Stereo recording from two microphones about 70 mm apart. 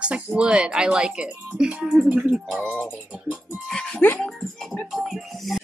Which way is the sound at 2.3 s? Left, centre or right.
Centre.